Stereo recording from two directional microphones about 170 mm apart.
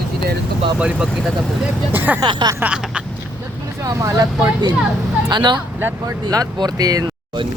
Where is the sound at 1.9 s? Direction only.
10° right (ahead or behind).